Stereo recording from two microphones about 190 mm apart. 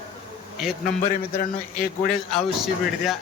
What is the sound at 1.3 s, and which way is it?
Speech, 40° left (ahead or behind).